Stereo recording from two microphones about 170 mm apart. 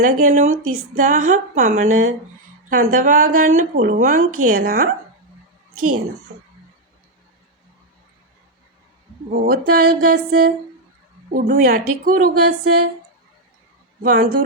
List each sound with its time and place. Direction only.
0.0 s a woman's voice: 45° right (ahead or behind); by 4.9 s 60° right (ahead or behind)
9.3 s speech: 60° right (ahead or behind)
14.0 s speech: 55° right (ahead or behind)